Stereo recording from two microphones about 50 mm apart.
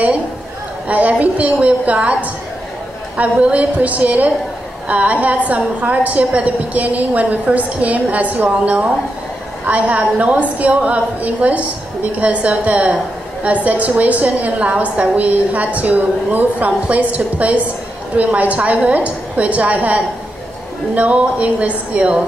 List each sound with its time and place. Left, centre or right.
0.8 s a woman's voice: right
3.2 s a woman's voice: right